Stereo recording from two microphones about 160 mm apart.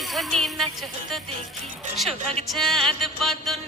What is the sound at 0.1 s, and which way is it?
Music, centre (ahead or behind).